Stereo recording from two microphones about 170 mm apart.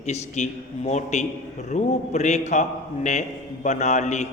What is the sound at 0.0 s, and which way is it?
A man's voice, 45° left (ahead or behind).